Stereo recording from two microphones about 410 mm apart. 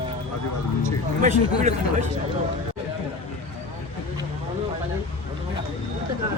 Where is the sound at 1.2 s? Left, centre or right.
Centre.